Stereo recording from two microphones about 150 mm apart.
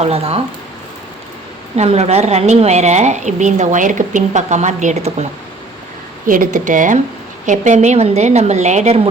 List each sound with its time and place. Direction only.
0.0 s speech: 40° right (ahead or behind)
1.7 s a woman's voice: 45° right (ahead or behind)
6.2 s a woman's voice: 65° right (ahead or behind)